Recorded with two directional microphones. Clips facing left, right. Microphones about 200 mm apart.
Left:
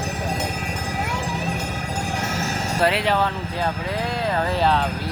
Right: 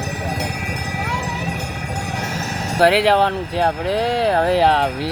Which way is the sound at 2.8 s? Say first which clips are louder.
Right 7 dB; 70° right (ahead or behind).